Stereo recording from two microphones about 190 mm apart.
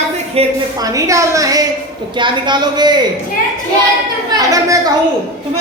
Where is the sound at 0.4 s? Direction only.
30° right (ahead or behind).